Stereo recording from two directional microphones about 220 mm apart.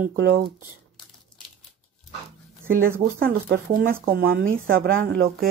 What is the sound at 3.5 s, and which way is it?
Speech, 45° right (ahead or behind).